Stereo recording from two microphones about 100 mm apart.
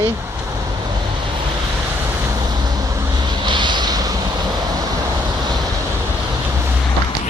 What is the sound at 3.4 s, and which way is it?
Vehicle, 50° right (ahead or behind).